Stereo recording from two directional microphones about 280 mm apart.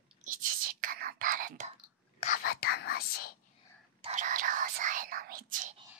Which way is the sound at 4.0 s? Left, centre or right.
Right.